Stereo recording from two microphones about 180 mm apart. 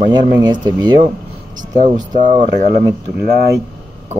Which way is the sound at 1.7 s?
45° right (ahead or behind).